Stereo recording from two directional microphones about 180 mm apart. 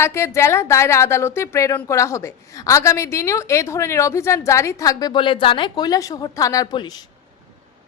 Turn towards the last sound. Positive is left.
turn(degrees=25)  # may be behind; listen again after turning